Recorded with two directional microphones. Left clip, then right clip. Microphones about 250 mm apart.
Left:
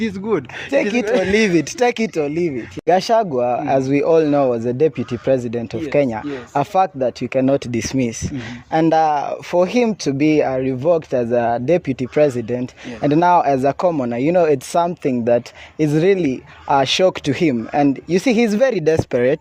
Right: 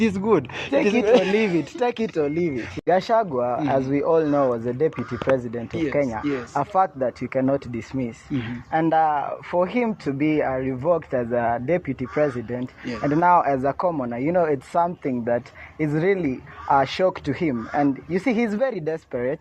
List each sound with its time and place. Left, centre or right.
0.0 s speech: centre
0.7 s speech: left
1.0 s speech: centre
1.3 s speech: left